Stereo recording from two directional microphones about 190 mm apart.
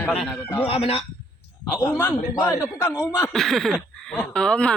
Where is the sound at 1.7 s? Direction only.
10° left (ahead or behind).